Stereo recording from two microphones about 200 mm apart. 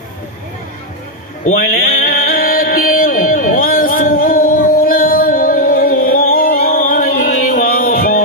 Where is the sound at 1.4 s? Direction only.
45° left (ahead or behind).